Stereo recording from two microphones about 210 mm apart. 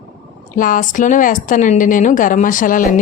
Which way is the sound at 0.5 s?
40° left (ahead or behind).